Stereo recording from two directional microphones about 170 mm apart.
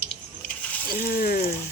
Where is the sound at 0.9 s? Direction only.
60° left (ahead or behind).